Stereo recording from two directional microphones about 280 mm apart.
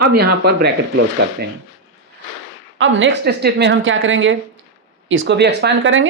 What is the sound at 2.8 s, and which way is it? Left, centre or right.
Speech, right.